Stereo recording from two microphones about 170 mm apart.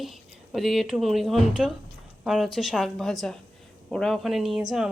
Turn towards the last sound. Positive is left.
turn(degrees=-5)  # may be behind; listen again after turning